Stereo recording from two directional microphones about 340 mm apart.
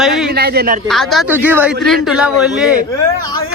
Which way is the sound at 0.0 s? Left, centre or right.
Centre.